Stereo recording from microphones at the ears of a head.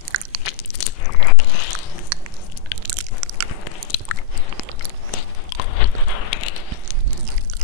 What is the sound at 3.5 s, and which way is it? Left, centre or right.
Biting, left.